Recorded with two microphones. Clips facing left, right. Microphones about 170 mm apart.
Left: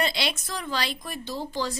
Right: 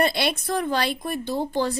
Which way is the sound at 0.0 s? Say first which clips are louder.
Right 5 dB; 55° right (ahead or behind).